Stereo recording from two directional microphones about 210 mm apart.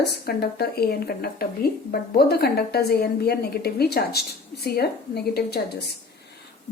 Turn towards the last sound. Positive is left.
turn(degrees=50)  # may be behind; listen again after turning